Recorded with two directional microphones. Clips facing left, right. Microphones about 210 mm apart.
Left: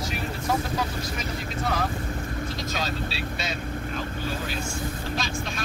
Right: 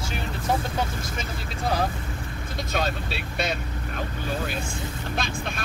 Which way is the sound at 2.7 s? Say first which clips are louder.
Right 7 dB; 55° right (ahead or behind).